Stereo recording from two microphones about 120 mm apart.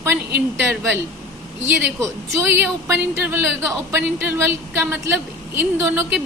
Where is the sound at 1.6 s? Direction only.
20° right (ahead or behind).